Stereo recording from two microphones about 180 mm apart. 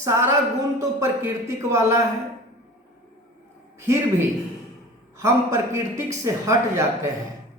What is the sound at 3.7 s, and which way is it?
Speech, 15° right (ahead or behind).